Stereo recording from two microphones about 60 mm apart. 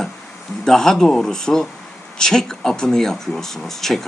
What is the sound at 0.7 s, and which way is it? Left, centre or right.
Speech, centre.